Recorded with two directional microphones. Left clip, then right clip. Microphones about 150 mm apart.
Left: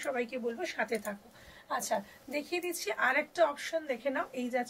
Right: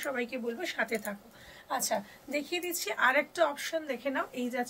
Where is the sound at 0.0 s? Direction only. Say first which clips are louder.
Even; 25° right (ahead or behind).